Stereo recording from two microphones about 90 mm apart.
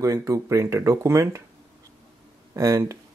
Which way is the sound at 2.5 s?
35° right (ahead or behind).